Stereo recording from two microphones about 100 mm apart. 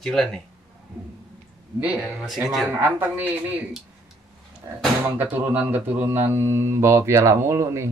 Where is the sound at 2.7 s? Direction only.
20° right (ahead or behind).